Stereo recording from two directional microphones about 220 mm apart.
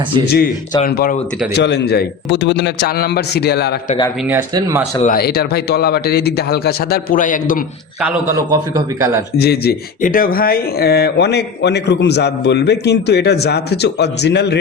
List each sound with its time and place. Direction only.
0.9 s speech: 45° left (ahead or behind)
5.0 s speech: 45° left (ahead or behind)
8.0 s a man's voice: 15° right (ahead or behind)
9.4 s speech: 45° left (ahead or behind)